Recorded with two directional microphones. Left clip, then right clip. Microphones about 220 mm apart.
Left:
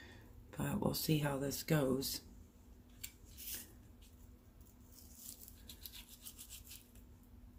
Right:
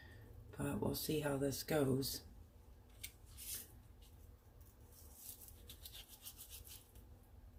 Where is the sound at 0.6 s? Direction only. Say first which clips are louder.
Left 3 dB; 45° left (ahead or behind).